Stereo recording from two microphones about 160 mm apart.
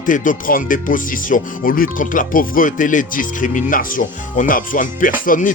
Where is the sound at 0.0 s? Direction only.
55° left (ahead or behind).